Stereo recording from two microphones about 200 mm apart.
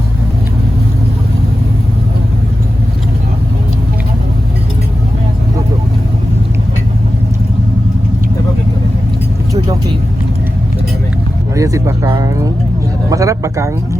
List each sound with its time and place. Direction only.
11.5 s speech: 15° right (ahead or behind)